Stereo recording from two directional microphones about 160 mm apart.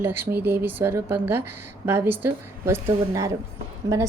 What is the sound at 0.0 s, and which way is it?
A woman's voice, 15° right (ahead or behind).